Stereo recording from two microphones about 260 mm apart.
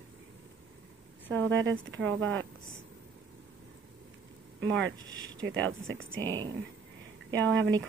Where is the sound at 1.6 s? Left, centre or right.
Right.